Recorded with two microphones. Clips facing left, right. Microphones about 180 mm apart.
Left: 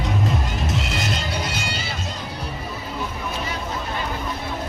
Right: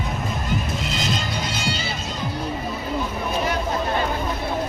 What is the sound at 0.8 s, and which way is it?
Music, 65° left (ahead or behind).